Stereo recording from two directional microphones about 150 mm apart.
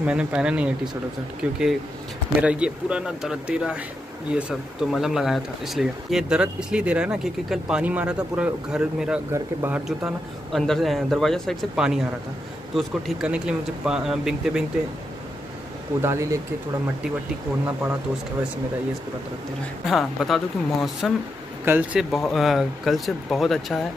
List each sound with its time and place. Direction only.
0.0 s speech: 10° right (ahead or behind)
9.8 s speech: centre (ahead or behind)
16.0 s speech: 20° right (ahead or behind)
19.9 s speech: centre (ahead or behind)
21.6 s speech: 15° right (ahead or behind)
22.1 s speech: centre (ahead or behind)